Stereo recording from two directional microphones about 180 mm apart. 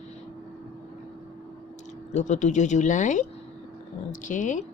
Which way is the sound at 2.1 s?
40° left (ahead or behind).